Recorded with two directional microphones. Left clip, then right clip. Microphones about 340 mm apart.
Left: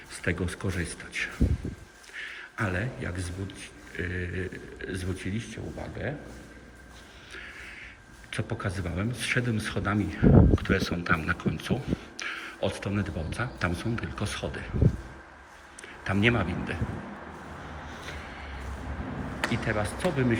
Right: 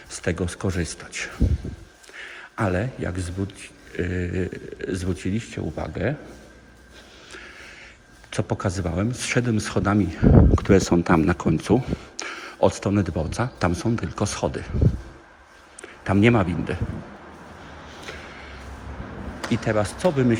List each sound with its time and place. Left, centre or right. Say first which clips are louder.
0.1 s a man's voice: right 4 dB; centre
7.3 s a sound: right 1 dB; centre
8.3 s a man's voice: right 7 dB; centre
15.8 s speech: right 6 dB; centre
18.0 s a sound: right 6 dB; centre
19.5 s a man's voice: right 7 dB; centre